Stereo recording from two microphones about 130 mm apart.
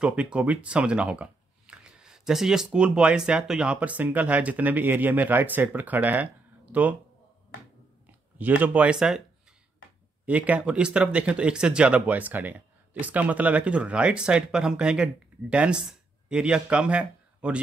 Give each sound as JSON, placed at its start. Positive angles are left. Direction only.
{"t": 0.0, "sound": "speech", "side_deg": -10}
{"t": 8.1, "sound": "speech", "side_deg": -15}
{"t": 10.2, "sound": "speech", "side_deg": -10}